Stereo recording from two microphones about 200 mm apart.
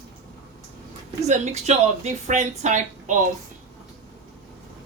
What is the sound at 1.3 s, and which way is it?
A woman's voice, 35° right (ahead or behind).